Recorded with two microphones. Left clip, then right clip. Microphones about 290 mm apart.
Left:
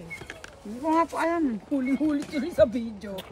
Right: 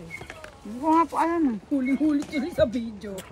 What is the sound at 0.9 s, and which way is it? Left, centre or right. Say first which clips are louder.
Speech: right 3 dB; centre.